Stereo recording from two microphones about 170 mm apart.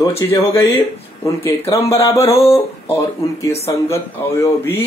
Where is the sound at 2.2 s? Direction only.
35° left (ahead or behind).